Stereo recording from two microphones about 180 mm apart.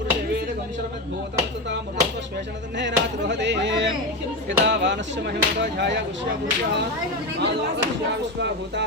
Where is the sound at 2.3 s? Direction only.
80° right.